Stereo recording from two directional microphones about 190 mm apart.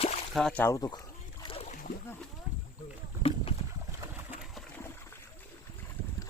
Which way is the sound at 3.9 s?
10° right (ahead or behind).